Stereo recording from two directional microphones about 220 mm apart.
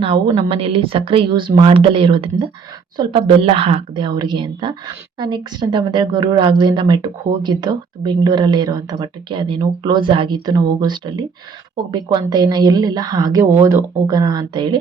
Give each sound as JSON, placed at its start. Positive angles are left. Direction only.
{"t": 0.0, "sound": "a woman's voice", "side_deg": -25}